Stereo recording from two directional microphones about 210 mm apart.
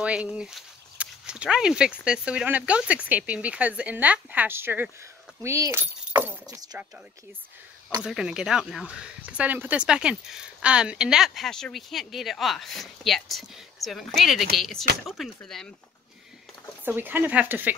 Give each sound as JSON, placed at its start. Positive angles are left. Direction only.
{"t": 0.0, "sound": "speech", "side_deg": -5}
{"t": 8.0, "sound": "speech", "side_deg": -5}
{"t": 16.8, "sound": "speech", "side_deg": -10}